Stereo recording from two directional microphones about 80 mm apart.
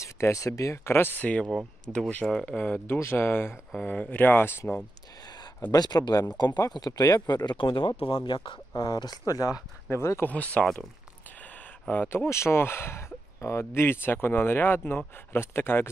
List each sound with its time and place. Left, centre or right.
0.0 s speech: left
5.2 s a sound: left
5.7 s speech: left
6.9 s speech: left
8.1 s speech: left
8.7 s speech: left
9.8 s speech: left
10.2 s speech: centre
10.6 s speech: centre
11.9 s speech: left
12.3 s speech: left